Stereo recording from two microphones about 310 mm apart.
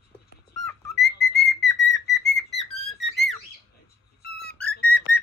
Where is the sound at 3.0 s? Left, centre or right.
Centre.